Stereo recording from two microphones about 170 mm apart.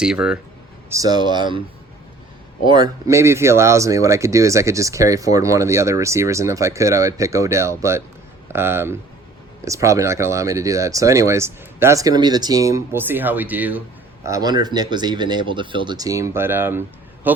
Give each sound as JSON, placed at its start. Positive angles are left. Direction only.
{"t": 0.0, "sound": "speech", "side_deg": -5}
{"t": 0.9, "sound": "speech", "side_deg": -20}
{"t": 2.6, "sound": "speech", "side_deg": -25}
{"t": 14.3, "sound": "speech", "side_deg": -20}